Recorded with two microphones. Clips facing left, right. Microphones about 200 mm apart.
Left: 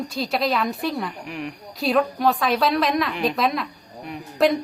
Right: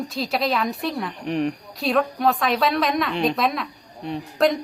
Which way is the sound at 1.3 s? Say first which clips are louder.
Right 8 dB; 35° right (ahead or behind).